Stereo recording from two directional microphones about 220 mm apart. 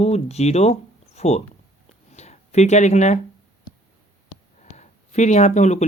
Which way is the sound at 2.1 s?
30° left (ahead or behind).